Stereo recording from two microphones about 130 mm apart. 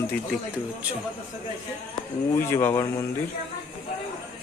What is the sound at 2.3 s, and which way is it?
Speech, 20° left (ahead or behind).